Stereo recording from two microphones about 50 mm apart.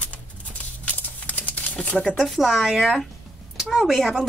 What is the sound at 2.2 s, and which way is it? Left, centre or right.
Speech, centre.